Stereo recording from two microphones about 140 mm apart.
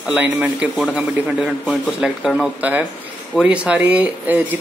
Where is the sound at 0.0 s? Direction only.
10° right (ahead or behind).